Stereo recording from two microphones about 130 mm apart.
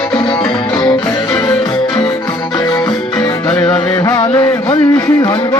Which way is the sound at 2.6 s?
30° left (ahead or behind).